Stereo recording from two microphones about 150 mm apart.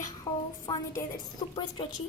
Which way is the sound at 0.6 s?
25° left (ahead or behind).